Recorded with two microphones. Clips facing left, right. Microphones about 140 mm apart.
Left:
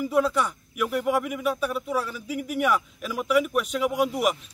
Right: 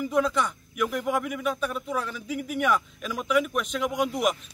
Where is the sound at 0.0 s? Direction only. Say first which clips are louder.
Left 2 dB; 5° left (ahead or behind).